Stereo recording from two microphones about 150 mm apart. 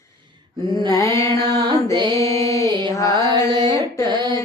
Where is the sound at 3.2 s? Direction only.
30° right (ahead or behind).